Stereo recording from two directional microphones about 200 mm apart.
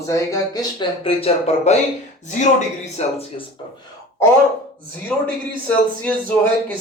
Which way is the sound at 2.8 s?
35° left (ahead or behind).